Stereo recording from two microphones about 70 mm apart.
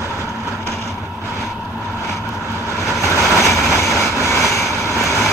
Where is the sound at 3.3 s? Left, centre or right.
Left.